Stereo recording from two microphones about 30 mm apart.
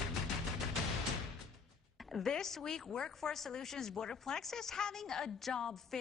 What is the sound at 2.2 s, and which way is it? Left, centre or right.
A woman's voice, centre.